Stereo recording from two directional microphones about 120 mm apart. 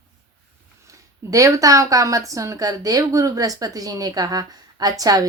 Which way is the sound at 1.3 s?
30° right (ahead or behind).